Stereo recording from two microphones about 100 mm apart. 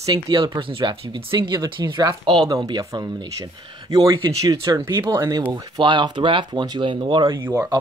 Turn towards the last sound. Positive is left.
turn(degrees=-20)  # may be behind; listen again after turning